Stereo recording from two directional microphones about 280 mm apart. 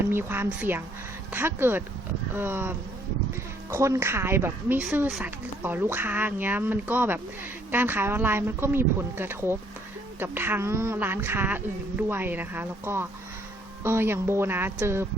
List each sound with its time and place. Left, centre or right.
0.0 s speech: centre